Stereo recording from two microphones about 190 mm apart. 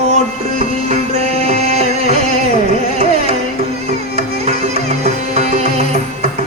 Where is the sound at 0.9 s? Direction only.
35° right (ahead or behind).